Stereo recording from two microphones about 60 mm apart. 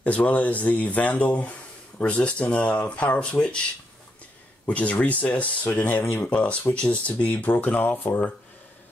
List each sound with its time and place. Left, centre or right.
0.0 s speech: left
4.6 s speech: left